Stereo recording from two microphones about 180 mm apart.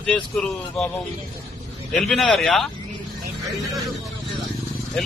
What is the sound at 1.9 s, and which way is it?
Speech, centre (ahead or behind).